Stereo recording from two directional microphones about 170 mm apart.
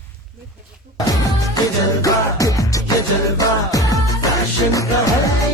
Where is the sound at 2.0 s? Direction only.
20° left (ahead or behind).